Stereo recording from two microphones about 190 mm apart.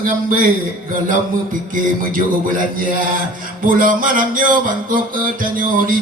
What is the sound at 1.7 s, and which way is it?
Music, 45° right (ahead or behind).